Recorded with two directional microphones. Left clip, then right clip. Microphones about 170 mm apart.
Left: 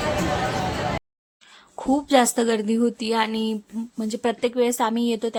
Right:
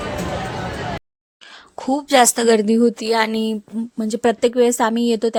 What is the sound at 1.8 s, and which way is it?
A woman's voice, 35° right (ahead or behind).